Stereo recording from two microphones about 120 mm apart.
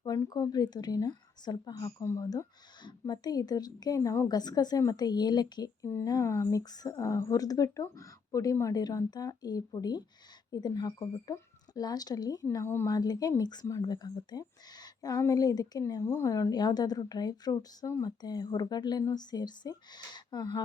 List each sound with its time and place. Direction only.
0.0 s speech: 30° left (ahead or behind)